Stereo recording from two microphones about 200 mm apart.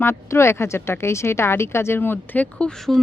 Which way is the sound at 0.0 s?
15° left (ahead or behind).